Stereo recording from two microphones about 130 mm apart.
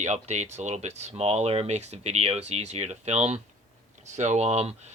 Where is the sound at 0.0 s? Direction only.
65° right (ahead or behind).